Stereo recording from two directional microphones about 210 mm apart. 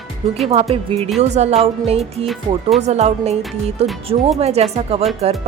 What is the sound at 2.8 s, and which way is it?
Speech, 30° right (ahead or behind).